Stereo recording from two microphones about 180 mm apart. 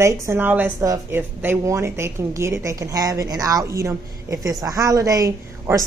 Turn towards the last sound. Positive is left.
turn(degrees=-15)  # may be behind; listen again after turning